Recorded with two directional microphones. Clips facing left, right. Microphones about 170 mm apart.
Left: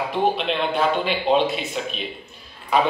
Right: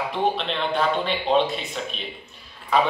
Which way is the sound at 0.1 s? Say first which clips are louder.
Left 4 dB; 5° left (ahead or behind).